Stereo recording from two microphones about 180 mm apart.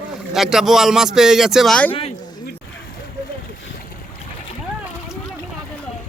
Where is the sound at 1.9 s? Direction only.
30° left (ahead or behind).